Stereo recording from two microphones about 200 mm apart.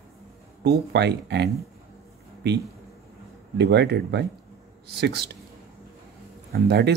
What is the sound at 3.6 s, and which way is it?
Speech, 60° right (ahead or behind).